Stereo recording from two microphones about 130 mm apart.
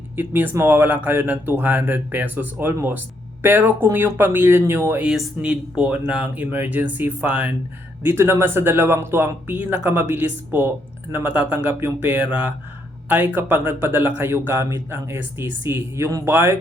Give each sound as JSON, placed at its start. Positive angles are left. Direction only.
{"t": 0.2, "sound": "speech", "side_deg": -15}